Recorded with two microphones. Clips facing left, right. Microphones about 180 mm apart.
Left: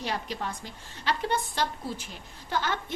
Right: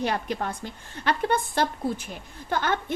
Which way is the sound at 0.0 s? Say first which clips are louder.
Right 5 dB; 55° right (ahead or behind).